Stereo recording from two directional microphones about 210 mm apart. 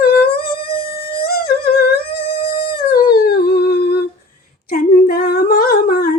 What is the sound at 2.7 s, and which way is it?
Humming, 45° left (ahead or behind).